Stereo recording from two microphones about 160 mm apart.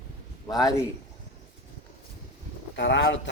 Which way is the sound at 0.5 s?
20° left (ahead or behind).